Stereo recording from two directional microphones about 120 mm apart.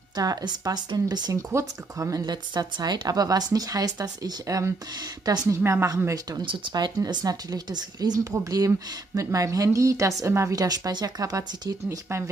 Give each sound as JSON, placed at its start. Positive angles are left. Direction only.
{"t": 0.1, "sound": "a woman's voice", "side_deg": -35}
{"t": 6.4, "sound": "a woman's voice", "side_deg": -45}